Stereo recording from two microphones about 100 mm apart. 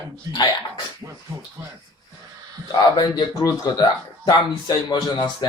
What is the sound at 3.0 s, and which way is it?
Speech, 45° left (ahead or behind).